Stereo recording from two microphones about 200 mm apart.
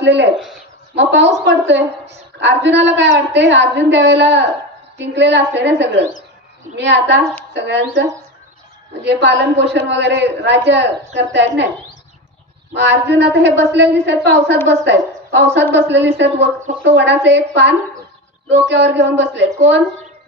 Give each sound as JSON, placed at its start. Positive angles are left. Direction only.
{"t": 0.0, "sound": "a woman's voice", "side_deg": -60}
{"t": 12.7, "sound": "a woman's voice", "side_deg": -60}